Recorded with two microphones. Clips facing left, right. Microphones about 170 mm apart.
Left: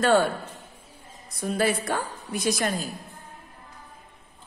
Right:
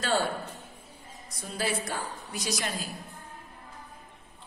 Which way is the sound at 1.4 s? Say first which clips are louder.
Left 7 dB; 55° left (ahead or behind).